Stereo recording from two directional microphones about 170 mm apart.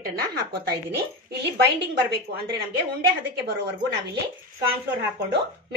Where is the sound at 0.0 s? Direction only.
65° right (ahead or behind).